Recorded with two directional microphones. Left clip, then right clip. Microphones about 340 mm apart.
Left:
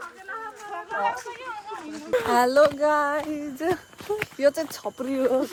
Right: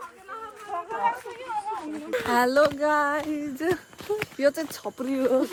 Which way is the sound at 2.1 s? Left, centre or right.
Centre.